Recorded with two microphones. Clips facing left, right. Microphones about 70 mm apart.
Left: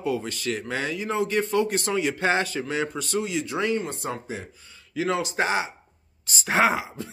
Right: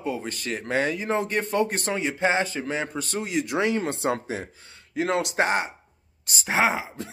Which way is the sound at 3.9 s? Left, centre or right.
Right.